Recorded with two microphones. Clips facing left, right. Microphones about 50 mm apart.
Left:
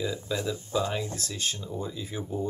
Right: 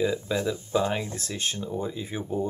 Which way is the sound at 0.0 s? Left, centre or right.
Centre.